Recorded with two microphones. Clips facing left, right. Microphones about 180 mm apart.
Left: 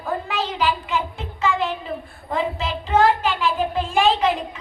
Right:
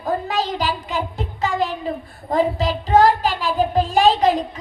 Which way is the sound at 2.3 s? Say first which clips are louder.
Right 5 dB; 40° right (ahead or behind).